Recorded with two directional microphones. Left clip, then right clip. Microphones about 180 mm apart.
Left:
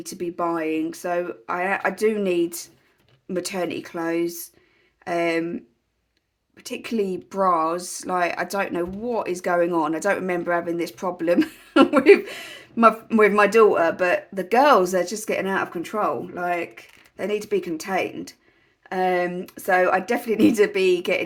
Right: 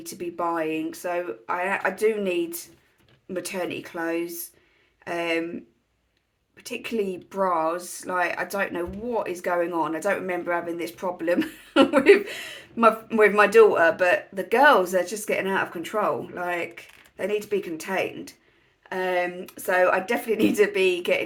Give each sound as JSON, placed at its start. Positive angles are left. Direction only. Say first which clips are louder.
{"t": 0.0, "sound": "speech", "louder": "left 2 dB", "side_deg": 45}
{"t": 6.6, "sound": "speech", "louder": "left 2 dB", "side_deg": 45}